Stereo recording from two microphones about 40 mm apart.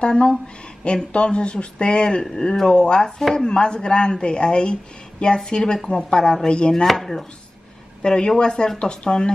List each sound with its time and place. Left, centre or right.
0.0 s speech: left
3.0 s chopping: centre
3.5 s speech: left
5.9 s chopping: left
6.9 s chopping: centre
8.0 s speech: left